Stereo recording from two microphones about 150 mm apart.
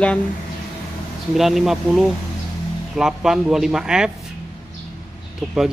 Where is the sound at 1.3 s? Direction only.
Centre (ahead or behind).